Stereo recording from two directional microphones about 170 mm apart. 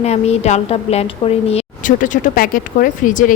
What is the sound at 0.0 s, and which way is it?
A woman's voice, 40° left (ahead or behind).